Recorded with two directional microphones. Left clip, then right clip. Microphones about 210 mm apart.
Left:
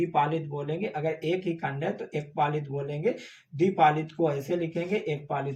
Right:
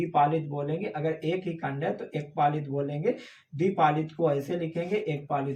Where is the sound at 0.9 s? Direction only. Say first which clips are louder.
Left 2 dB; 10° right (ahead or behind).